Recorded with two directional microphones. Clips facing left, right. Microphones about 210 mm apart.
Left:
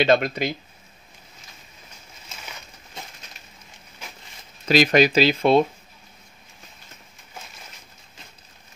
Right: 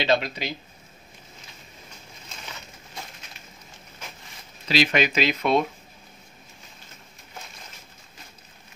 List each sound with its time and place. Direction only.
0.0 s speech: 50° left (ahead or behind)
4.6 s speech: 40° left (ahead or behind)